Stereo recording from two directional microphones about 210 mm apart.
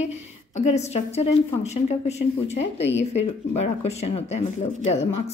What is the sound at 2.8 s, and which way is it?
Speech, 60° left (ahead or behind).